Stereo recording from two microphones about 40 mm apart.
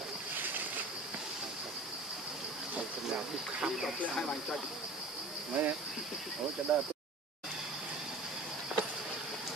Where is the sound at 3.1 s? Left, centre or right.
Centre.